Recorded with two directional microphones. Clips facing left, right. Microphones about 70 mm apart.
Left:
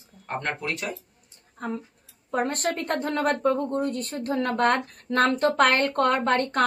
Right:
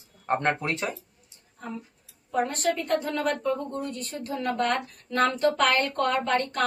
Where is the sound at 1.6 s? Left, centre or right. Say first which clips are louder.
Left 6 dB; left.